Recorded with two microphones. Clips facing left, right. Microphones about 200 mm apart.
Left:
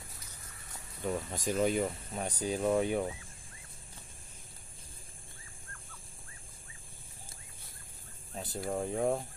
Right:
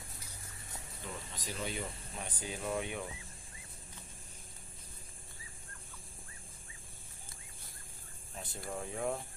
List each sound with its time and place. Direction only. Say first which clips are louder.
1.0 s speech: left 11 dB; 50° left (ahead or behind)
8.6 s speech: left 6 dB; 40° left (ahead or behind)